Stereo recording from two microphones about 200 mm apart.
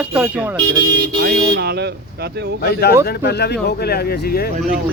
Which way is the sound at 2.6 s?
55° left (ahead or behind).